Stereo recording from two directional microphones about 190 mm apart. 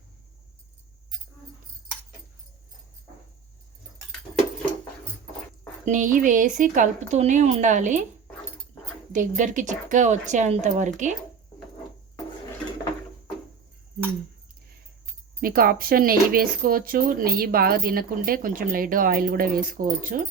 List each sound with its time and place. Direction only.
5.8 s a woman's voice: 40° right (ahead or behind)
9.1 s a woman's voice: 40° right (ahead or behind)
15.4 s speech: 50° right (ahead or behind)